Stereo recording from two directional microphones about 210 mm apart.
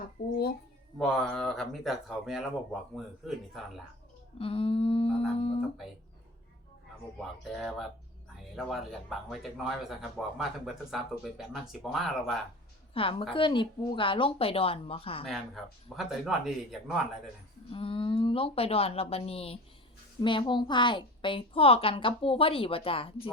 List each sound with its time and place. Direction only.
0.2 s speech: 50° left (ahead or behind)
0.9 s speech: centre (ahead or behind)
4.4 s a woman's voice: 25° left (ahead or behind)
7.2 s speech: centre (ahead or behind)
12.9 s a woman's voice: 25° left (ahead or behind)
15.3 s speech: centre (ahead or behind)
17.7 s a woman's voice: 25° left (ahead or behind)